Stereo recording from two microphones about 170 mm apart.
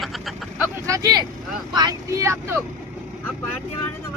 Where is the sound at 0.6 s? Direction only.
20° right (ahead or behind).